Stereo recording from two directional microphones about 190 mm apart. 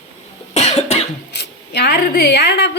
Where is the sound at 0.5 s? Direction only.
35° left (ahead or behind).